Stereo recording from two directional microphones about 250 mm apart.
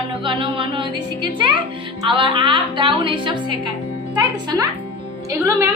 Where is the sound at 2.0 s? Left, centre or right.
Centre.